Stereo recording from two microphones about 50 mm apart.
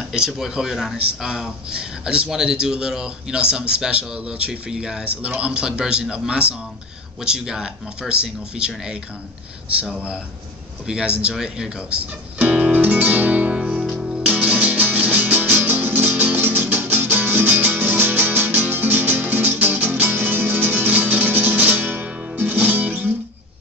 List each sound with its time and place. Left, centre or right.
0.1 s a man's voice: centre
10.9 s a man's voice: centre
12.5 s music: right